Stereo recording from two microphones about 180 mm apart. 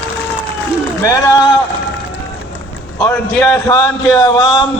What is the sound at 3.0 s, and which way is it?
A man's voice, 10° left (ahead or behind).